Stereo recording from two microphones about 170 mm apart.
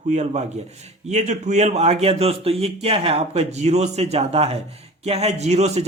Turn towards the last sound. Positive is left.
turn(degrees=-40)  # may be behind; listen again after turning